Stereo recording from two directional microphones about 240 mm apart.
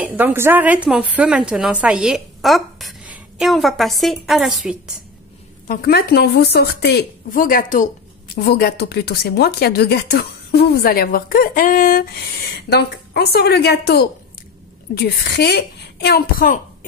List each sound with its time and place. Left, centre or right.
0.0 s a woman's voice: centre
5.7 s a woman's voice: left